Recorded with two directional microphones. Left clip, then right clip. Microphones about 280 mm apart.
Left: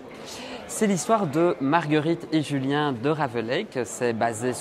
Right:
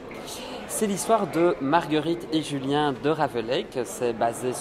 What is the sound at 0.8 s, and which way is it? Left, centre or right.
Speech, left.